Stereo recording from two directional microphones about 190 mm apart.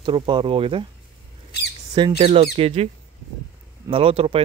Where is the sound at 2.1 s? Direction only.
35° right (ahead or behind).